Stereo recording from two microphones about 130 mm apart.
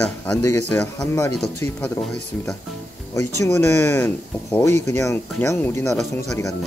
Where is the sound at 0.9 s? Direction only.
25° left (ahead or behind).